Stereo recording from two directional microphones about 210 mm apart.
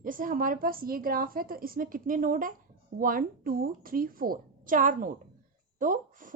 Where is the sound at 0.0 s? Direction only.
40° right (ahead or behind).